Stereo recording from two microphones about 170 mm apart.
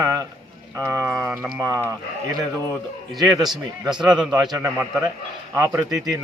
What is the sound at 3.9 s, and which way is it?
Speech, 25° right (ahead or behind).